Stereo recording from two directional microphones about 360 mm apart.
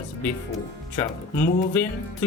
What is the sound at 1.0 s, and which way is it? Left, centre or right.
Speech, centre.